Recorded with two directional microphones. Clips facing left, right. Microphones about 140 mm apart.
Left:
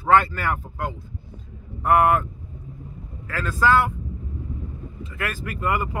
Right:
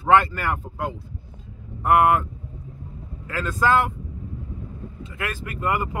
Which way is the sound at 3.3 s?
20° right (ahead or behind).